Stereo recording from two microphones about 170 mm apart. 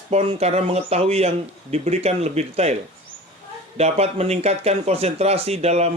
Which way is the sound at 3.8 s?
40° right (ahead or behind).